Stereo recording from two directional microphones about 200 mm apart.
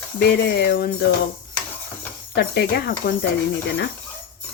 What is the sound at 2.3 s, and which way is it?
Speech, 55° left (ahead or behind).